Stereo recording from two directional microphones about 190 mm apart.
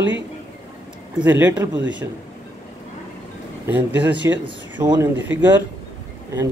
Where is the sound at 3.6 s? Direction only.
10° right (ahead or behind).